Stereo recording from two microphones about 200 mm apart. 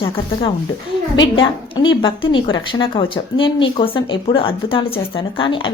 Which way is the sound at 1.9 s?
25° left (ahead or behind).